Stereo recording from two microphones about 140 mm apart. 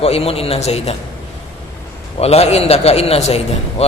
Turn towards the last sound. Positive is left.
turn(degrees=50)  # may be behind; listen again after turning